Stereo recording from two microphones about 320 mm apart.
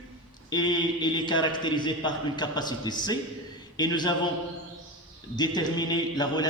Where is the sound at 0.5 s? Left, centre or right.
Centre.